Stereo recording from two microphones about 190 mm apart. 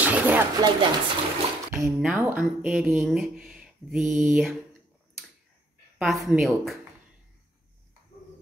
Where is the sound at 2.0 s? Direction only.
10° right (ahead or behind).